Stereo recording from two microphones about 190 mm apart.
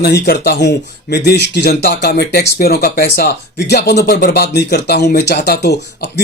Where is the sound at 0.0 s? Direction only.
55° left (ahead or behind).